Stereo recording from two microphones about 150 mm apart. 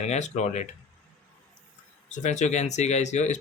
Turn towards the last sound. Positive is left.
turn(degrees=50)  # may be behind; listen again after turning